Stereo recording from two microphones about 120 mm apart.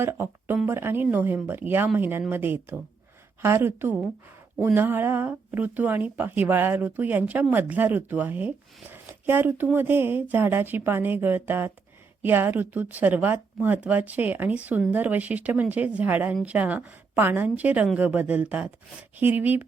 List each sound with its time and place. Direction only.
0.0 s a woman's voice: 20° right (ahead or behind)